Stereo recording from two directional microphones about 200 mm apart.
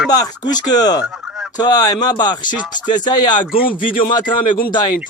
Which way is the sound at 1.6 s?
20° left (ahead or behind).